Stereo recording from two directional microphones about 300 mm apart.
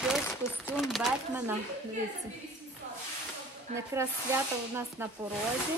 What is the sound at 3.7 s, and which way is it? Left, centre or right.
Music, right.